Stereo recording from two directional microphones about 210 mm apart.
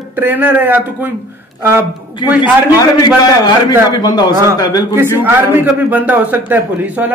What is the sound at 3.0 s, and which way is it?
A man's voice, 20° left (ahead or behind).